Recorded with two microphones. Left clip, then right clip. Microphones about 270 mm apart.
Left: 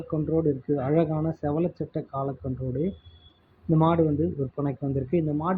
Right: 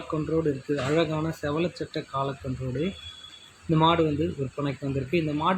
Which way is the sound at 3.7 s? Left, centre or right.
Centre.